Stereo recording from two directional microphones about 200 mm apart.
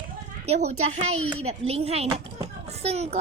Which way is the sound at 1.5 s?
30° right (ahead or behind).